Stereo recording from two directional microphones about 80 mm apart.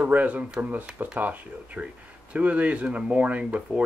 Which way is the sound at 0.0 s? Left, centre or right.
Centre.